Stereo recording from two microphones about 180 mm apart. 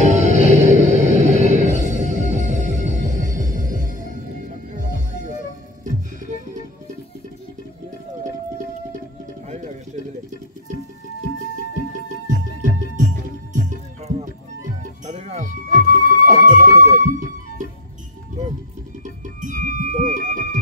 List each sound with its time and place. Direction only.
0.0 s music: 40° right (ahead or behind)
4.7 s music: 45° right (ahead or behind)
13.5 s music: 45° right (ahead or behind)
19.0 s music: 45° right (ahead or behind)